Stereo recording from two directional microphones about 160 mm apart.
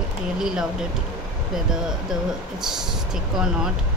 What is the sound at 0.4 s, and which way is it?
Speech, 5° right (ahead or behind).